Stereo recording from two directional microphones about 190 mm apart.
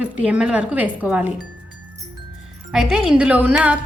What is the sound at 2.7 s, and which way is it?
Speech, 5° right (ahead or behind).